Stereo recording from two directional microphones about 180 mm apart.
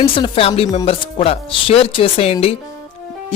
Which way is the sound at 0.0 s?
30° left (ahead or behind).